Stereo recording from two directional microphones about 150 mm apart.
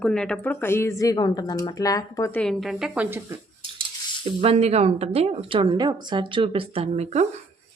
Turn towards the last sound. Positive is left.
turn(degrees=-45)  # may be behind; listen again after turning